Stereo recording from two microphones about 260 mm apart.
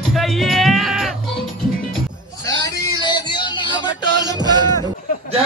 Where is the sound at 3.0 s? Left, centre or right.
Centre.